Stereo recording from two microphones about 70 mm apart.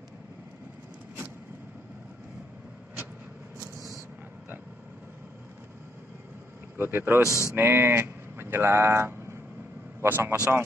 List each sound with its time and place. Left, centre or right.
6.8 s a man's voice: right
7.2 s speech: left
7.5 s a man's voice: right